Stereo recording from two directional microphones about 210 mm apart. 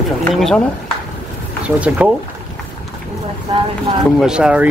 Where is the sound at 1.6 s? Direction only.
5° right (ahead or behind).